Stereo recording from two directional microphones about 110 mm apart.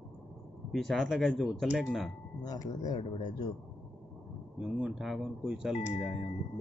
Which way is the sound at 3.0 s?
90° left.